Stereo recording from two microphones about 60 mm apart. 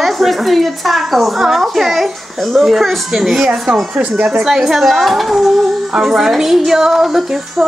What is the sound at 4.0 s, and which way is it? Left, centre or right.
Speech, right.